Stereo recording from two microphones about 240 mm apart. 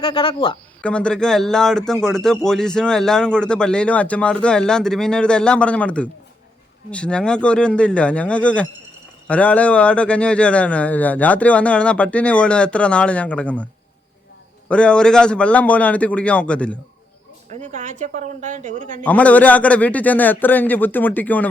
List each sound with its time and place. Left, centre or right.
0.0 s speech: left
0.8 s speech: centre
14.7 s speech: centre
17.5 s a woman's voice: right
19.0 s a man's voice: centre